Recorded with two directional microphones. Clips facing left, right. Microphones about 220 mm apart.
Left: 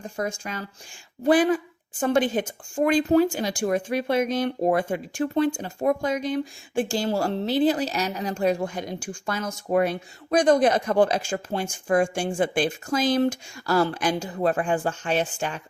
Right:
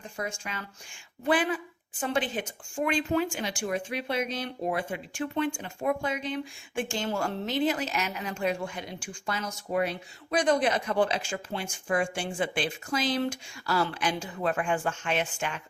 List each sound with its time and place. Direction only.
0.0 s a woman's voice: 40° left (ahead or behind)